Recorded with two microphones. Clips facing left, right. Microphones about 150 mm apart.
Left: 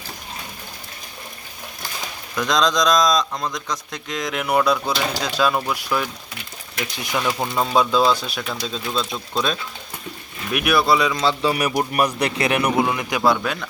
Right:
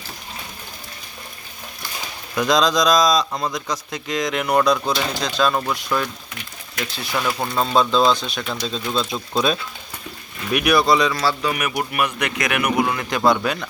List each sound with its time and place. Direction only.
2.3 s speech: 5° right (ahead or behind)
6.8 s speech: 20° left (ahead or behind)
7.3 s speech: 5° left (ahead or behind)
10.5 s speech: centre (ahead or behind)
11.1 s a man's voice: 20° left (ahead or behind)
11.5 s speech: 35° left (ahead or behind)
12.8 s speech: 15° left (ahead or behind)
13.3 s speech: centre (ahead or behind)